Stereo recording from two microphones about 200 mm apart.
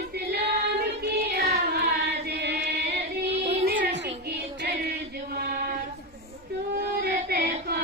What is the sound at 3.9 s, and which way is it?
Music, 60° right (ahead or behind).